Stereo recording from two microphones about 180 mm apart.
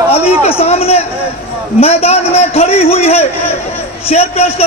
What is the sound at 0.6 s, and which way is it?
A man's voice, 35° left (ahead or behind).